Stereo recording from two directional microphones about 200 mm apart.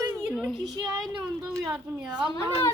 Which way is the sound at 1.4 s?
15° right (ahead or behind).